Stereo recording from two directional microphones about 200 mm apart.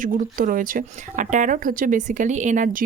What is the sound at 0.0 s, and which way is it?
Speech, 45° right (ahead or behind).